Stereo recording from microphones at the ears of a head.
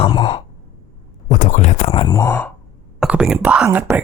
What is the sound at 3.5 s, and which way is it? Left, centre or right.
Speech, right.